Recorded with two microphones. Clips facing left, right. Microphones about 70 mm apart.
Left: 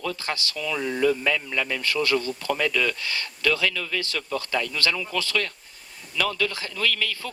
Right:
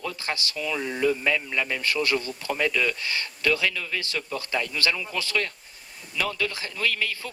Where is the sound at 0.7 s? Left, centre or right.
Left.